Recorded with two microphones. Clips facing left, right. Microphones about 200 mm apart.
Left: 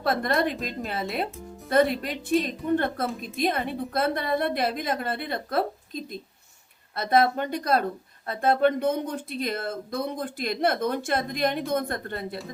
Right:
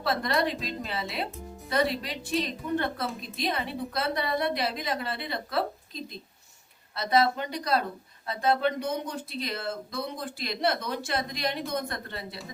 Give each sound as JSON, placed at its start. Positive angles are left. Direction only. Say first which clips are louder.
{"t": 0.0, "sound": "a woman's voice", "louder": "left 3 dB", "side_deg": 50}
{"t": 1.7, "sound": "speech", "louder": "left 5 dB", "side_deg": 50}